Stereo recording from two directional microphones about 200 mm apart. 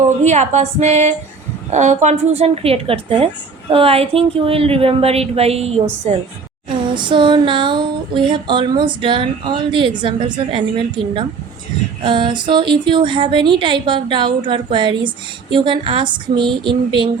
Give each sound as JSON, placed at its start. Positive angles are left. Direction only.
{"t": 0.3, "sound": "a woman's voice", "side_deg": -35}
{"t": 6.9, "sound": "a woman's voice", "side_deg": -25}